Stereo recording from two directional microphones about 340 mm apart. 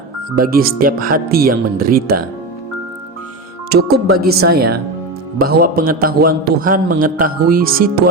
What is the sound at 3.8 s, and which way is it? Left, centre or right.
A man's voice, right.